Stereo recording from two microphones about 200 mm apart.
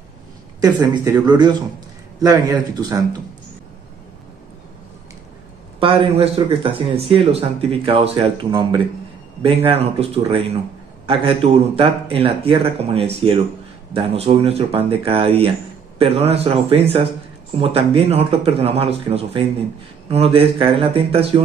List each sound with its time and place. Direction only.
0.6 s a man's voice: 20° right (ahead or behind)
5.8 s speech: 30° right (ahead or behind)